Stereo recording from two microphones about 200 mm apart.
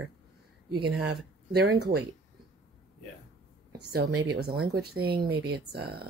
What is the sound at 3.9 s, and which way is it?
Speech, 55° right (ahead or behind).